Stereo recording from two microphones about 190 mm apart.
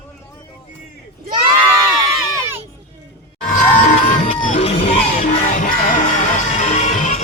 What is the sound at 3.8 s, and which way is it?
Music, 40° left (ahead or behind).